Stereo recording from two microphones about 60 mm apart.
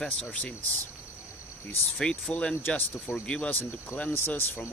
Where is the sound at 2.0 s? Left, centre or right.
Centre.